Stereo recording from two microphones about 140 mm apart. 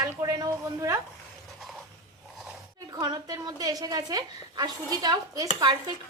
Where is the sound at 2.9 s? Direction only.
30° right (ahead or behind).